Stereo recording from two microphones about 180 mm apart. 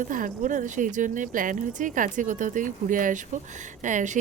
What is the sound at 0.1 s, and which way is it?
A woman's voice, 45° right (ahead or behind).